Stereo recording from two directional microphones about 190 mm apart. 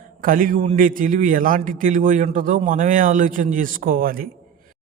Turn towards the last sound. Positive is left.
turn(degrees=-50)  # may be behind; listen again after turning